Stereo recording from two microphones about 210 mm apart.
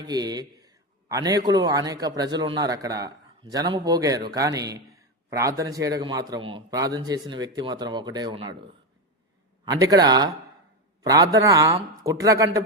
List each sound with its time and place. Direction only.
0.0 s a man's voice: 20° right (ahead or behind)
9.6 s a man's voice: 20° right (ahead or behind)